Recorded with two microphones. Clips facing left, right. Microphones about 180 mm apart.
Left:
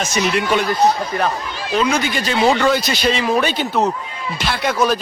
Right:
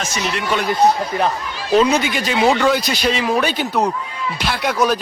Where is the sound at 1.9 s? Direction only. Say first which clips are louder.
Right 1 dB; 15° right (ahead or behind).